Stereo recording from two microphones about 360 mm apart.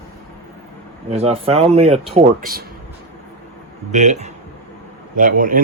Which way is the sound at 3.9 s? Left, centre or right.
Centre.